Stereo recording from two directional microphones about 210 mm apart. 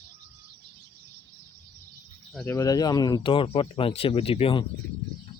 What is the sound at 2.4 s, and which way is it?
Speech, 15° left (ahead or behind).